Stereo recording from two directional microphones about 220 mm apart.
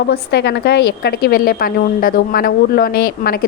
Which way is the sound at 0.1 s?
50° left (ahead or behind).